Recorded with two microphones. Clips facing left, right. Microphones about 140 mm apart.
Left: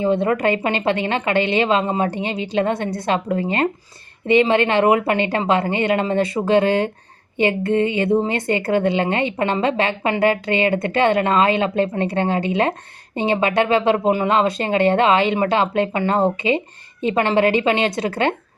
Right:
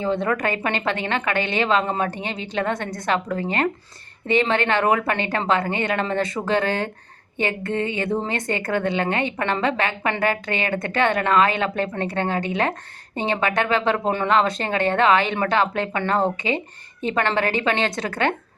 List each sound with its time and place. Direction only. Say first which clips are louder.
0.0 s a woman's voice: left 5 dB; 20° left (ahead or behind)